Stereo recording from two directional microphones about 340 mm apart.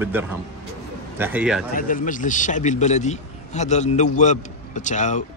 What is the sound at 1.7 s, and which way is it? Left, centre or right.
A man's voice, left.